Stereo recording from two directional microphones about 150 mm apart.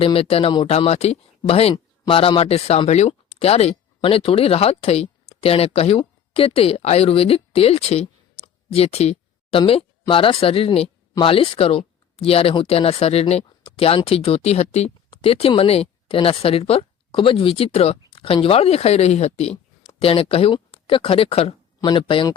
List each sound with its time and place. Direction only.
0.0 s speech: 40° left (ahead or behind)
18.1 s a sound: 35° left (ahead or behind)
18.4 s speech: 40° left (ahead or behind)